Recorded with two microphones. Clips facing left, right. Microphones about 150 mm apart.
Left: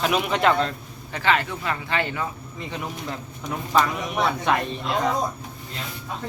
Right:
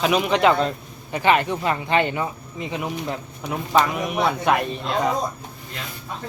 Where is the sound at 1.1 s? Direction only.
20° right (ahead or behind).